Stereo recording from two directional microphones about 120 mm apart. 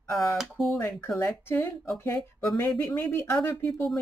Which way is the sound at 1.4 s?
20° left (ahead or behind).